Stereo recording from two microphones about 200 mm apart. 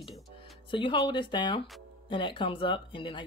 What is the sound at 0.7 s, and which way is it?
Speech, 25° left (ahead or behind).